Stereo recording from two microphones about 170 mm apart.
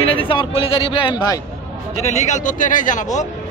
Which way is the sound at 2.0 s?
45° left (ahead or behind).